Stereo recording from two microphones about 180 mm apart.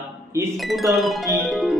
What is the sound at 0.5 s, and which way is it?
Speech, centre (ahead or behind).